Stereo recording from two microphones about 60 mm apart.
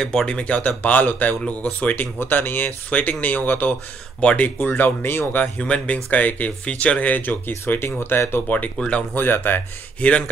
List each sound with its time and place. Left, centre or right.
0.0 s speech: centre
0.3 s speech: left
2.1 s speech: left; by 4.5 s centre
4.6 s speech: left
5.6 s speech: centre; by 8.3 s left
8.7 s speech: left
9.1 s speech: left
9.9 s speech: left